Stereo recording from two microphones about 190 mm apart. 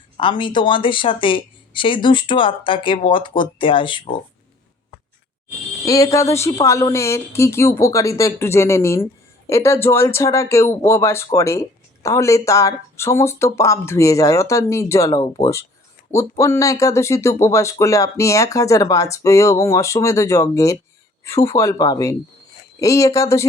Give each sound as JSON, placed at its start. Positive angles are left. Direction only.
{"t": 0.2, "sound": "speech", "side_deg": 25}
{"t": 5.8, "sound": "speech", "side_deg": 15}